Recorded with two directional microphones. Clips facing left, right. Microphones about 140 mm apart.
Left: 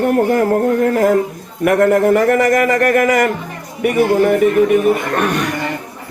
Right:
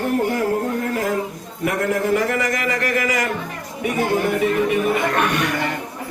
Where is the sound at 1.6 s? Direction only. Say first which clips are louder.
Left 9 dB; 60° left (ahead or behind).